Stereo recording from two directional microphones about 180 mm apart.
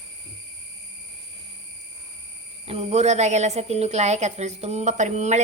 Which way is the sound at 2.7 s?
35° right (ahead or behind).